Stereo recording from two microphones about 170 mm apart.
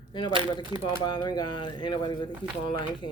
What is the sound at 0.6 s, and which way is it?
Speech, 25° right (ahead or behind).